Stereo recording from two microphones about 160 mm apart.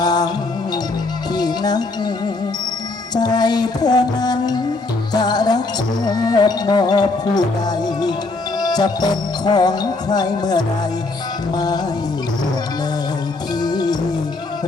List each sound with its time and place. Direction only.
0.0 s music: 25° left (ahead or behind)
1.4 s music: 25° left (ahead or behind)
3.2 s music: 25° left (ahead or behind)
8.5 s music: 25° left (ahead or behind)
13.6 s music: 25° left (ahead or behind)